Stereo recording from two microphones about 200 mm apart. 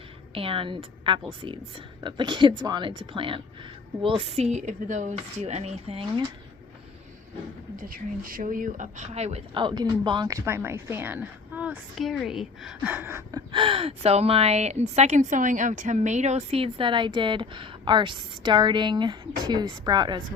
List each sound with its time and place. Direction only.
0.3 s a woman's voice: 25° right (ahead or behind)
7.8 s speech: 45° right (ahead or behind); by 13.4 s 10° right (ahead or behind)
13.5 s a woman's voice: 25° right (ahead or behind)